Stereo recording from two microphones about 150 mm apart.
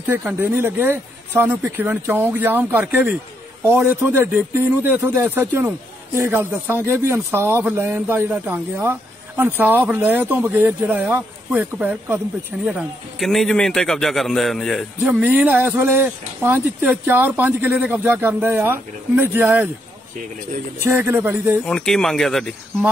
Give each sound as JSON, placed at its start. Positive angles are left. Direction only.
{"t": 0.0, "sound": "a man's voice", "side_deg": -15}
{"t": 13.3, "sound": "a man's voice", "side_deg": 0}
{"t": 20.8, "sound": "a man's voice", "side_deg": -15}
{"t": 21.6, "sound": "speech", "side_deg": 5}